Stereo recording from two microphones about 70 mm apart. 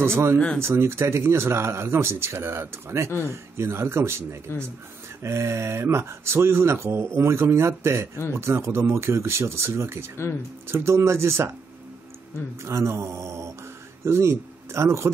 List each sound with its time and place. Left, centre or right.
0.0 s speech: right
12.6 s mantra: right
14.0 s speech: right